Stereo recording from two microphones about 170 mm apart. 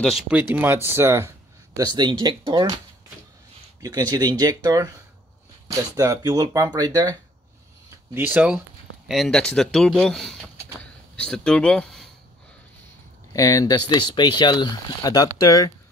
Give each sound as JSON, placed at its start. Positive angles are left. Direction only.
{"t": 0.0, "sound": "speech", "side_deg": -5}
{"t": 3.8, "sound": "speech", "side_deg": -25}
{"t": 7.9, "sound": "speech", "side_deg": -10}
{"t": 13.3, "sound": "speech", "side_deg": 20}